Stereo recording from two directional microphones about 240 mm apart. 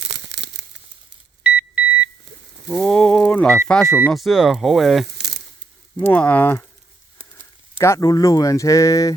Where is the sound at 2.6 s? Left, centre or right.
Centre.